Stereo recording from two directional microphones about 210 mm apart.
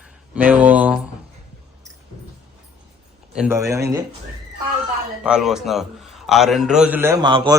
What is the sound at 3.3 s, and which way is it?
Speech, 10° right (ahead or behind).